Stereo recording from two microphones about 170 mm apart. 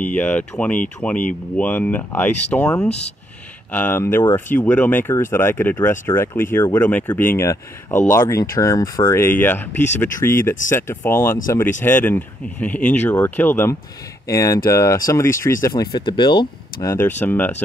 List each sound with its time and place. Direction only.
0.0 s speech: 10° left (ahead or behind)
3.7 s speech: 10° left (ahead or behind); by 16.4 s 25° left (ahead or behind)
16.8 s speech: 15° left (ahead or behind)